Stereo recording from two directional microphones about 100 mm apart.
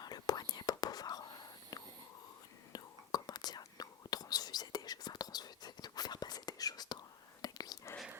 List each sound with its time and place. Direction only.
0.0 s whispering: 40° left (ahead or behind)